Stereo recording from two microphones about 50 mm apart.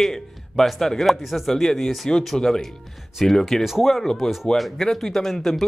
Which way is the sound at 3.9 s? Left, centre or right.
Centre.